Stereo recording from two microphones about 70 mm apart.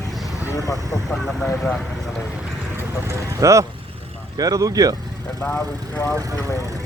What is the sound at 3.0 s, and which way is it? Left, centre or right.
Vehicle, right.